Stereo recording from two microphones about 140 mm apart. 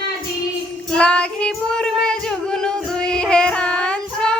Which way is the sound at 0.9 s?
5° left (ahead or behind).